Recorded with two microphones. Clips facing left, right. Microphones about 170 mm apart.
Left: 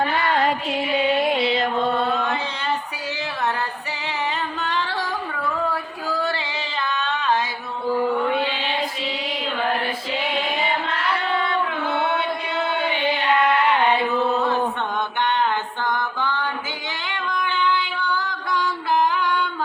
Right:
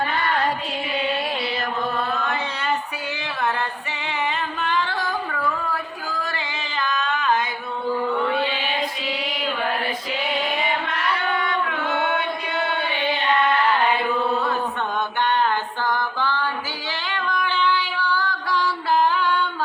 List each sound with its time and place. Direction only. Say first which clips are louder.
1.2 s music: left 6 dB; 20° left (ahead or behind)
6.2 s music: left 4 dB; 30° left (ahead or behind)
15.2 s a sound: right 1 dB; 20° left (ahead or behind)
17.1 s female singing: right 1 dB; 20° left (ahead or behind)